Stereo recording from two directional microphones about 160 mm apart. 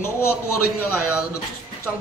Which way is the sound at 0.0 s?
15° left (ahead or behind).